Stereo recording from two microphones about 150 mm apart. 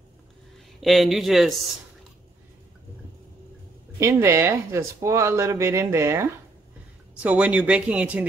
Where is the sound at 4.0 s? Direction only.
20° right (ahead or behind).